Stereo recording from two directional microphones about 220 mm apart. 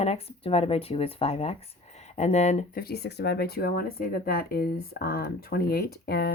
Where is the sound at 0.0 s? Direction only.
25° left (ahead or behind).